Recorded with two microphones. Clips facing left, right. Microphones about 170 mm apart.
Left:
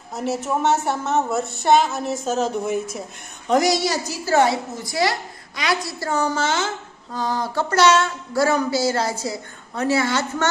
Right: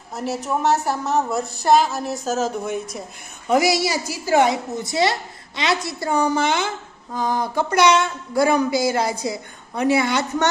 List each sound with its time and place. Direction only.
0.1 s a woman's voice: centre (ahead or behind); by 10.5 s 15° right (ahead or behind)